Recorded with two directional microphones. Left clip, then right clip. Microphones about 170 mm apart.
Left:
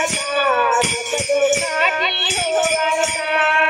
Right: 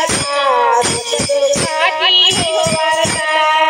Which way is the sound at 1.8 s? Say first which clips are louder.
Right 8 dB; 20° right (ahead or behind).